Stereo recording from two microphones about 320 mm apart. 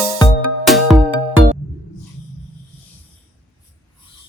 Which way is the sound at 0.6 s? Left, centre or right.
Centre.